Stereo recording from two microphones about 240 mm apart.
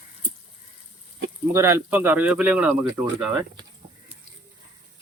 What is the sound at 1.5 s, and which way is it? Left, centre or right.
Speech, centre.